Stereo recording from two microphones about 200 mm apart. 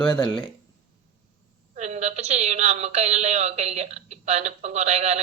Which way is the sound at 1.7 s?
35° right (ahead or behind).